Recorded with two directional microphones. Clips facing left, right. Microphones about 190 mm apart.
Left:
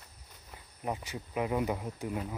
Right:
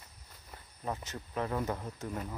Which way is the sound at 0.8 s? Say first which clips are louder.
Left 2 dB; 15° left (ahead or behind).